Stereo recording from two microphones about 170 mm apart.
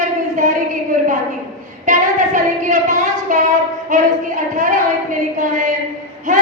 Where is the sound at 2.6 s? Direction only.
45° right (ahead or behind).